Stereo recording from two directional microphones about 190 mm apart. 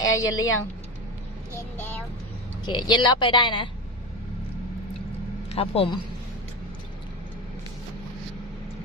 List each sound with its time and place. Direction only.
0.1 s a woman's voice: 20° left (ahead or behind)
2.6 s speech: 25° left (ahead or behind)
5.5 s speech: 30° left (ahead or behind)